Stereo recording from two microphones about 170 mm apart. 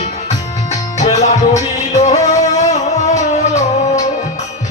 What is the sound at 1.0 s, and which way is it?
Music, 45° left (ahead or behind).